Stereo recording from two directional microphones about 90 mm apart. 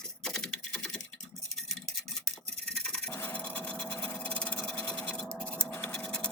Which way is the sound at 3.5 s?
15° left (ahead or behind).